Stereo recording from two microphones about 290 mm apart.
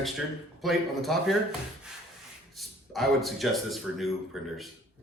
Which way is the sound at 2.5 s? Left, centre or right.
Centre.